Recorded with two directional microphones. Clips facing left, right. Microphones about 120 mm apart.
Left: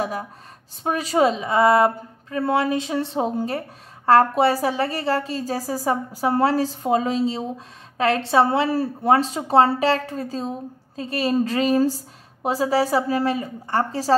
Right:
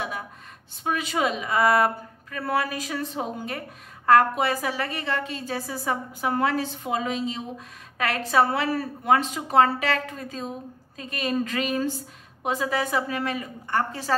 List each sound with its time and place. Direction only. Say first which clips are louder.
0.8 s a woman's voice: left 6 dB; 35° left (ahead or behind)